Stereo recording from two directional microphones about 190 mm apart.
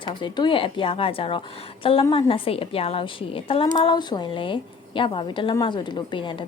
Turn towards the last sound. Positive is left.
turn(degrees=25)  # may be behind; listen again after turning